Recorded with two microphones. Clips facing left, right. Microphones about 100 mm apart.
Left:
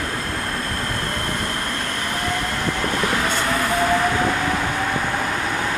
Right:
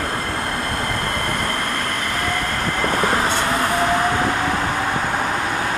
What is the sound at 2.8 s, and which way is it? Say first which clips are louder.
Train: right 4 dB; 40° right (ahead or behind).